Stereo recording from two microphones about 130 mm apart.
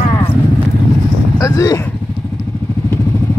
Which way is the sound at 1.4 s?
25° left (ahead or behind).